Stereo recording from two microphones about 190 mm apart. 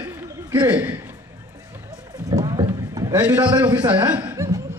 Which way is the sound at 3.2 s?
10° right (ahead or behind).